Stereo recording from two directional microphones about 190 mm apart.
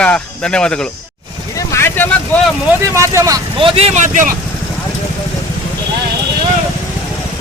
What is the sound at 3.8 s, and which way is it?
Speech, 35° right (ahead or behind).